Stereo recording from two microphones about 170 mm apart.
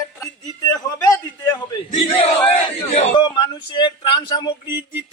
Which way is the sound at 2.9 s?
25° left (ahead or behind).